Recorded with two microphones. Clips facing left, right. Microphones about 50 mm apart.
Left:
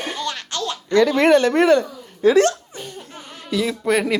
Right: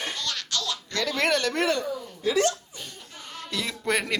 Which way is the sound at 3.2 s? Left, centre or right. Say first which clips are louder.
Left 1 dB; left.